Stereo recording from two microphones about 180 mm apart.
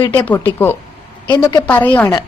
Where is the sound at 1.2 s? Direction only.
25° left (ahead or behind).